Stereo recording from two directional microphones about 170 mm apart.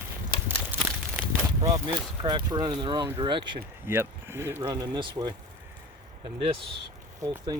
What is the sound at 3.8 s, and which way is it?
Speech, 15° right (ahead or behind).